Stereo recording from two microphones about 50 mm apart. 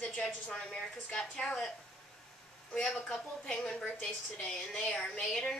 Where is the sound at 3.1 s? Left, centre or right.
Centre.